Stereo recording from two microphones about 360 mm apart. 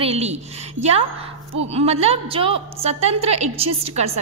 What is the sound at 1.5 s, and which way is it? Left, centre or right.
A woman's voice, centre.